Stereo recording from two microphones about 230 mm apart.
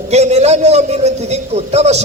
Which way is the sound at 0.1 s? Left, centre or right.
Right.